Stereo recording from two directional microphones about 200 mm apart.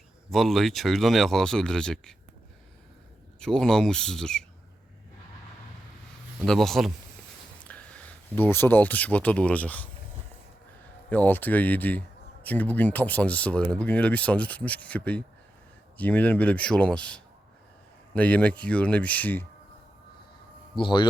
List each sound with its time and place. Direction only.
0.3 s speech: centre (ahead or behind)
3.4 s speech: 5° left (ahead or behind)
6.4 s speech: centre (ahead or behind)
11.1 s speech: 10° left (ahead or behind)
20.7 s a man's voice: 25° left (ahead or behind)